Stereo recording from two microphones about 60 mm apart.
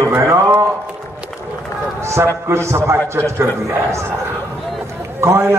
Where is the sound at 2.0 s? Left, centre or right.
Right.